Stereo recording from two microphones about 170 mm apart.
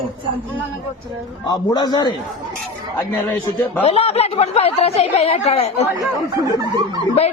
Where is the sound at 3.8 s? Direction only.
35° left (ahead or behind).